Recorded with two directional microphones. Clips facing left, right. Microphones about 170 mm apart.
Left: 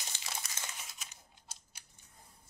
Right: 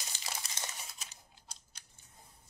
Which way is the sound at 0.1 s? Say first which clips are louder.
Right 1 dB; 35° right (ahead or behind).